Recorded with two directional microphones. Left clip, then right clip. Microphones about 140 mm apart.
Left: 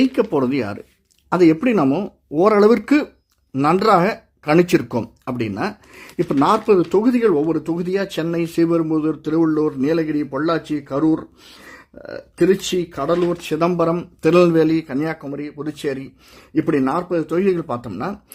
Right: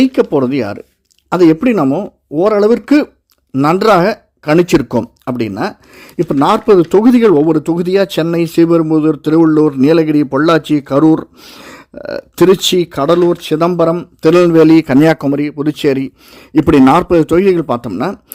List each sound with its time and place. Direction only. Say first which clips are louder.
0.0 s speech: right 6 dB; 35° right (ahead or behind)
1.8 s speech: right 5 dB; 20° right (ahead or behind)
3.5 s speech: right 5 dB; 40° right (ahead or behind)
14.8 s speech: right 14 dB; 90° right; by 16.0 s 70° right (ahead or behind)
16.6 s speech: right 11 dB; 85° right; by 18.2 s 55° right (ahead or behind)